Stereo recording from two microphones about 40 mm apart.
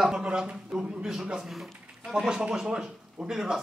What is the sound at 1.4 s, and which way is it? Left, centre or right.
A man's voice, centre.